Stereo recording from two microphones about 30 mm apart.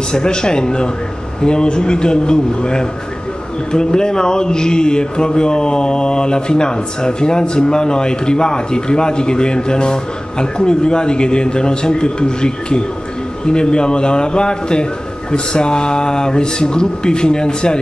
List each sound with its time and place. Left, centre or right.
0.1 s a man's voice: left